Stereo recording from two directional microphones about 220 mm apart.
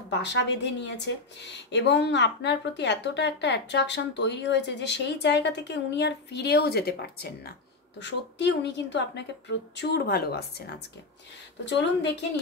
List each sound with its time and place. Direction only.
0.1 s a woman's voice: 50° left (ahead or behind)
11.6 s a woman's voice: 50° left (ahead or behind)